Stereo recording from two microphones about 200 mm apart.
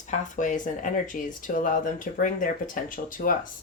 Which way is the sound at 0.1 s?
40° left (ahead or behind).